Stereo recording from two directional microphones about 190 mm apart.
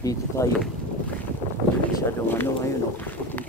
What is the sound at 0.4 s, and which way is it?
Speech, 15° left (ahead or behind).